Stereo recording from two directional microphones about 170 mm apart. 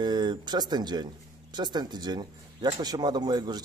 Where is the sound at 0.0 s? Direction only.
25° right (ahead or behind).